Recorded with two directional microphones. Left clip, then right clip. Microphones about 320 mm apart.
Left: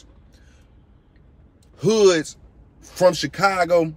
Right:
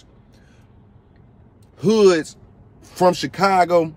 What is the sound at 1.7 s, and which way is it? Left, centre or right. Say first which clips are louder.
Speech: right 1 dB; centre.